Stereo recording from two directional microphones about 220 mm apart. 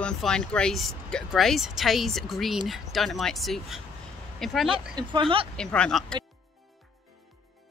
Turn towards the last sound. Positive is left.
turn(degrees=0)  # may be behind; listen again after turning